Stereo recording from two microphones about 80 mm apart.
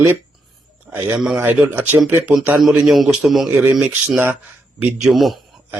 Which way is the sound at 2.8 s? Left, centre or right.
Centre.